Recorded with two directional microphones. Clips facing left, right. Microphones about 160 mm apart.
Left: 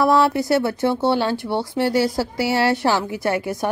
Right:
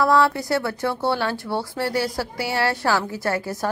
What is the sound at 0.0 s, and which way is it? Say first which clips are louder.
Speech: left 2 dB; 25° left (ahead or behind).